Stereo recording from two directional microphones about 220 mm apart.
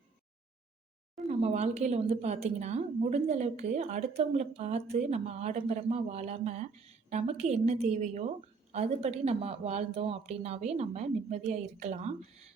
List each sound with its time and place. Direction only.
1.3 s a woman's voice: 30° right (ahead or behind)